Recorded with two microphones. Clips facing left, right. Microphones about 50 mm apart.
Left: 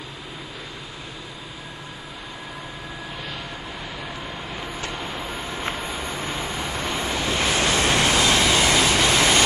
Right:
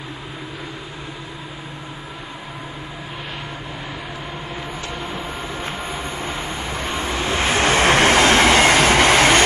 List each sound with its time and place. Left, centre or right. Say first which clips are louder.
6.2 s waves: right 2 dB; right